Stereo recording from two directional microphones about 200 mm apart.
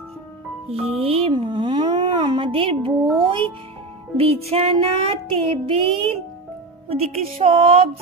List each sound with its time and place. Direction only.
0.7 s speech: centre (ahead or behind)
1.0 s music: 30° right (ahead or behind)